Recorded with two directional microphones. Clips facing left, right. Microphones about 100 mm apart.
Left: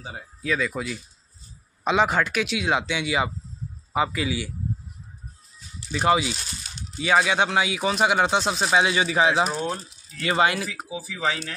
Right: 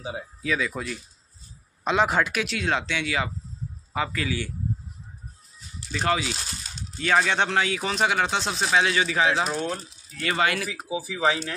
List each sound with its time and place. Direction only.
0.0 s speech: 5° right (ahead or behind)
5.9 s speech: 15° left (ahead or behind)
10.9 s speech: 10° right (ahead or behind)